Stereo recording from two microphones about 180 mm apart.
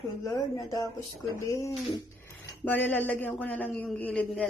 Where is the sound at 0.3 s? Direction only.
20° left (ahead or behind).